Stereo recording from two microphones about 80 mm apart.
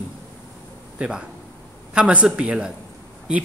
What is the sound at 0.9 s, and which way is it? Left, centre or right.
A man's voice, centre.